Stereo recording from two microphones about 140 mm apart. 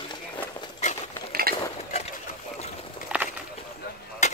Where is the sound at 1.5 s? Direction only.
90° right.